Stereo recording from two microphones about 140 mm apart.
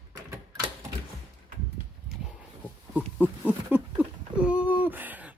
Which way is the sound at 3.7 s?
10° right (ahead or behind).